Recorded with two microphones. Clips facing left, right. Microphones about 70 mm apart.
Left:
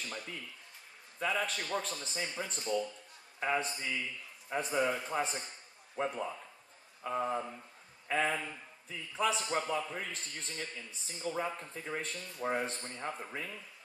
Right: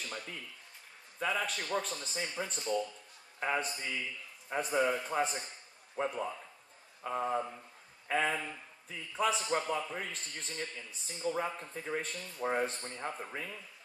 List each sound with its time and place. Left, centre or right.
0.0 s a man's voice: centre